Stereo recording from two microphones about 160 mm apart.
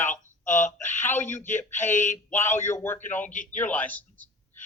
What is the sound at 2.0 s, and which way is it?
Speech, 50° left (ahead or behind).